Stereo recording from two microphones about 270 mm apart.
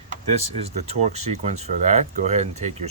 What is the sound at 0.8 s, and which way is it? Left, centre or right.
Speech, right.